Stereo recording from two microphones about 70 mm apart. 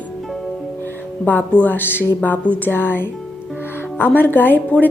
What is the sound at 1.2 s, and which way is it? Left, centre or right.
A woman's voice, left.